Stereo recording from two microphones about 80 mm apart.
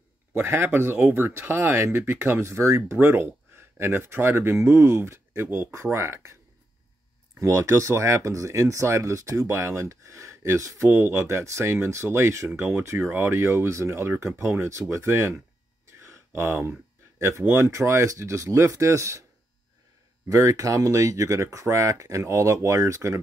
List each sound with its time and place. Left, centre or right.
0.3 s speech: right
7.3 s speech: right
15.9 s a sound: right
17.2 s speech: right
20.2 s speech: right